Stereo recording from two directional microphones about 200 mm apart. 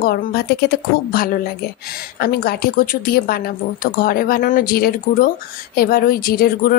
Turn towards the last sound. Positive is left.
turn(degrees=50)  # may be behind; listen again after turning